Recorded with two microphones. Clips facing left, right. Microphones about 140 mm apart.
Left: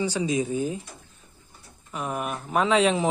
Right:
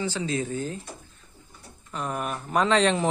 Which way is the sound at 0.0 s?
15° left (ahead or behind).